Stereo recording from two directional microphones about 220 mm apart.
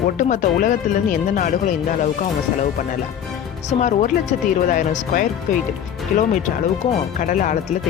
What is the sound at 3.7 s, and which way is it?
Speech, 35° left (ahead or behind).